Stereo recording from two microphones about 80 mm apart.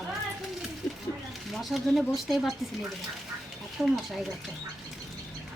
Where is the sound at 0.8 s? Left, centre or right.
Centre.